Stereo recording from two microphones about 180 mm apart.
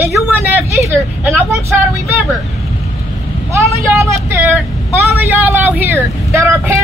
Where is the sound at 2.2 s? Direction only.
Centre (ahead or behind).